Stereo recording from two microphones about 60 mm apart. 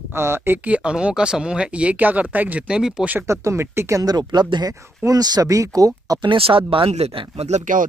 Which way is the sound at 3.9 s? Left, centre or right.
Right.